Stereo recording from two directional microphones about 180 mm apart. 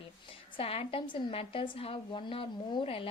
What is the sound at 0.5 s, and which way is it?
Speech, 30° left (ahead or behind).